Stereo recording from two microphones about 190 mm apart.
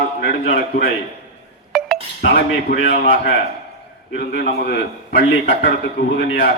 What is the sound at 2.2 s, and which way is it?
Speech, 55° left (ahead or behind).